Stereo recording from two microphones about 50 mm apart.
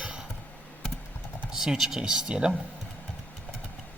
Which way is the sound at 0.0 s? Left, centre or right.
Centre.